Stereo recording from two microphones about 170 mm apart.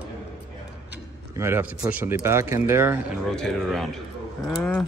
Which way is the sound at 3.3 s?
5° left (ahead or behind).